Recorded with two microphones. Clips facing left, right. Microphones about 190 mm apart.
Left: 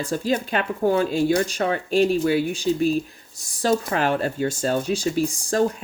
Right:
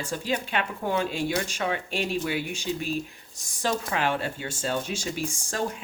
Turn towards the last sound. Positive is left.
turn(degrees=35)  # may be behind; listen again after turning